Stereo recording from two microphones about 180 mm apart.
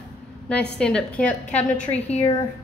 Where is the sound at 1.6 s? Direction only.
35° left (ahead or behind).